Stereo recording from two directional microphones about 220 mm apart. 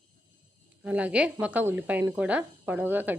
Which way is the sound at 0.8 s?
5° right (ahead or behind).